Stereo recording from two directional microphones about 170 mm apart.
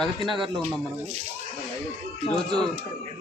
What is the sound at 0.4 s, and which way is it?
Speech, centre (ahead or behind).